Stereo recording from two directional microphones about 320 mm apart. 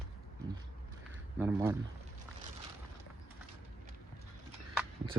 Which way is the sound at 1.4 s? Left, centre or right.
Centre.